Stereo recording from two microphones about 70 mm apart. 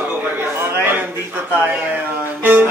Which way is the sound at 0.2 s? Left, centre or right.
Right.